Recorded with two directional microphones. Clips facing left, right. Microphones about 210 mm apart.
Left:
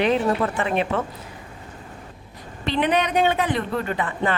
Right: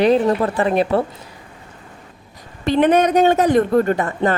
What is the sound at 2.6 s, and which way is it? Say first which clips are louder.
A woman's voice: right 7 dB; 45° right (ahead or behind).